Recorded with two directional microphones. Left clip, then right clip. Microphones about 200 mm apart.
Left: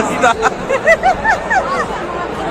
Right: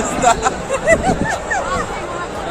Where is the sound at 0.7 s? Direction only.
35° left (ahead or behind).